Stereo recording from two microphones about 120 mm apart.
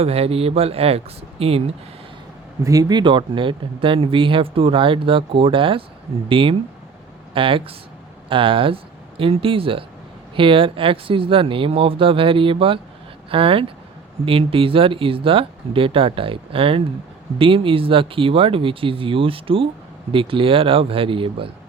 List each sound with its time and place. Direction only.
0.0 s speech: 55° right (ahead or behind)
2.6 s speech: 30° right (ahead or behind); by 21.5 s 45° right (ahead or behind)